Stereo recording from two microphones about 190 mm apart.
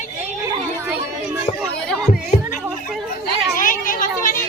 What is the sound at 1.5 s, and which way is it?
Music, 5° left (ahead or behind).